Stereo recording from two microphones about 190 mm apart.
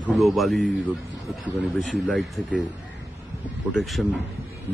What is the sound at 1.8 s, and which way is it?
Speech, centre (ahead or behind).